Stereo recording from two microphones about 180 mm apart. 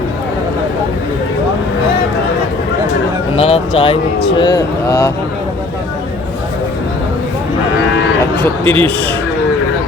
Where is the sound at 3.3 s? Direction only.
35° left (ahead or behind).